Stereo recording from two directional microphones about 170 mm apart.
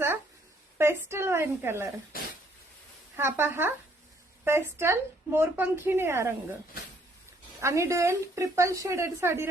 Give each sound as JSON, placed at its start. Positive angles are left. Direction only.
{"t": 0.8, "sound": "speech", "side_deg": -15}
{"t": 2.1, "sound": "a sound", "side_deg": 60}
{"t": 3.2, "sound": "speech", "side_deg": -15}
{"t": 7.6, "sound": "speech", "side_deg": -15}